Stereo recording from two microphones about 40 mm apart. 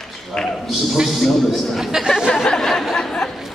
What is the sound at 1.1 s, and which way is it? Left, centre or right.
Speech, centre.